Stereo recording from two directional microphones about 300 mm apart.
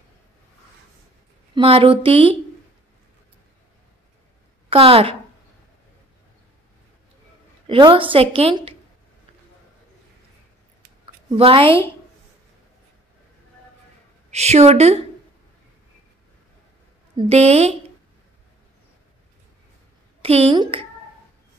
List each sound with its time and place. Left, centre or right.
1.5 s a woman's voice: centre
4.6 s a woman's voice: centre
7.6 s a woman's voice: centre
11.2 s a woman's voice: centre
14.3 s a woman's voice: right
17.2 s a woman's voice: right
20.2 s a woman's voice: centre